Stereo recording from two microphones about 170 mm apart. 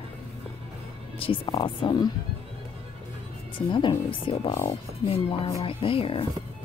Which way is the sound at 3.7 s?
30° left (ahead or behind).